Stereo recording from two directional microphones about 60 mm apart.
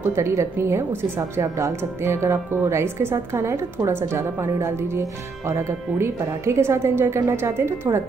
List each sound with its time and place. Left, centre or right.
0.1 s a woman's voice: right